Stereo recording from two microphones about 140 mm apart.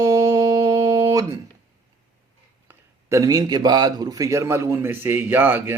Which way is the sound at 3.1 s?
25° right (ahead or behind).